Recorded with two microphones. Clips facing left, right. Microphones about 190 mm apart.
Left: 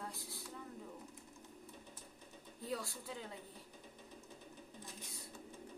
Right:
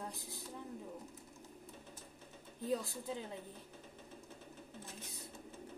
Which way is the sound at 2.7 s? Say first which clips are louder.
Right 5 dB; 20° right (ahead or behind).